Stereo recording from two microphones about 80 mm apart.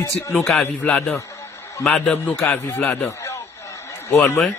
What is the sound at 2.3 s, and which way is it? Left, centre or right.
Speech, left.